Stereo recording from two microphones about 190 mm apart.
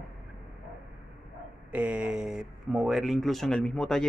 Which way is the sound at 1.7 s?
5° right (ahead or behind).